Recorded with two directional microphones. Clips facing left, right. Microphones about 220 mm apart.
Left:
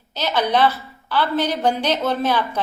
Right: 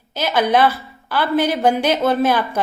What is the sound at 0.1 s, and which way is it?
A woman's voice, 10° right (ahead or behind).